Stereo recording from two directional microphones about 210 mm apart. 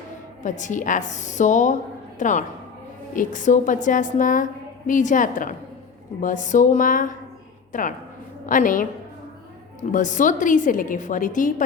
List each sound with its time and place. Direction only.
0.4 s a woman's voice: 35° left (ahead or behind)
9.9 s a woman's voice: 35° left (ahead or behind)